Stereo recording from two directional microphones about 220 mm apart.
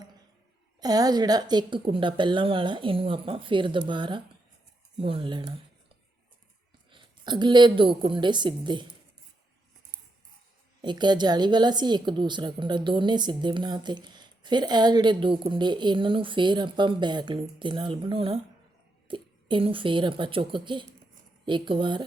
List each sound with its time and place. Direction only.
0.8 s a woman's voice: 15° right (ahead or behind)
6.9 s a woman's voice: 20° right (ahead or behind)
10.8 s a woman's voice: 20° right (ahead or behind)